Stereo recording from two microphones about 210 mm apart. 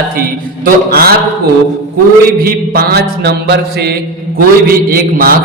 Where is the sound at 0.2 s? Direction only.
45° right (ahead or behind).